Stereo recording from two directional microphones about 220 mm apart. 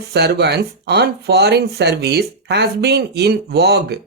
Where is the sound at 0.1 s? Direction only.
50° right (ahead or behind).